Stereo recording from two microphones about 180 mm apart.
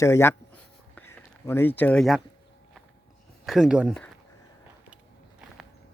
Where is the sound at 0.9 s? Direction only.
10° left (ahead or behind).